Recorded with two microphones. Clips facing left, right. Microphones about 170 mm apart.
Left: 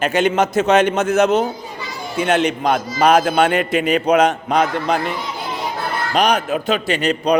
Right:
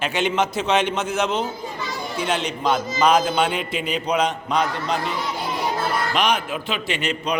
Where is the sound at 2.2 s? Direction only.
55° left (ahead or behind).